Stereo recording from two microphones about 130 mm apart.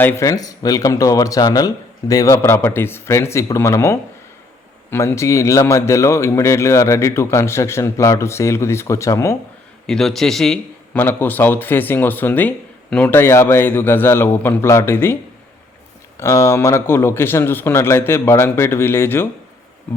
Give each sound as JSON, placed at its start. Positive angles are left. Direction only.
{"t": 0.0, "sound": "speech", "side_deg": 20}
{"t": 9.8, "sound": "a man's voice", "side_deg": 5}
{"t": 10.9, "sound": "speech", "side_deg": 15}